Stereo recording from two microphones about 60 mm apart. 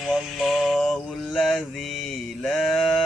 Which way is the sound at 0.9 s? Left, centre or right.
Centre.